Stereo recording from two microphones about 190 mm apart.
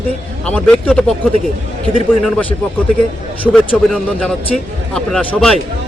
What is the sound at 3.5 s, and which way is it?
Speech, centre (ahead or behind).